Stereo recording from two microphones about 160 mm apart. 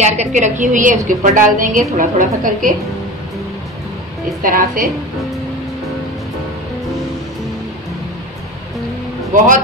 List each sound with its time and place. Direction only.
0.0 s a woman's voice: 45° right (ahead or behind)
4.4 s a woman's voice: 60° right (ahead or behind)